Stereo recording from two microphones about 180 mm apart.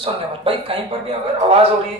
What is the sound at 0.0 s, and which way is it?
A man's voice, 30° right (ahead or behind).